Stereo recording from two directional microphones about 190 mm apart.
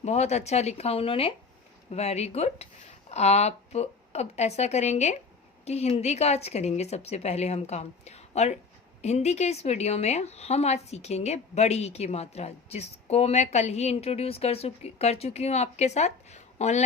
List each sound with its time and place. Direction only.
0.0 s a woman's voice: 35° left (ahead or behind)